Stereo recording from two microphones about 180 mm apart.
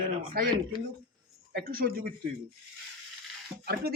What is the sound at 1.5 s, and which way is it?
Speech, 55° right (ahead or behind).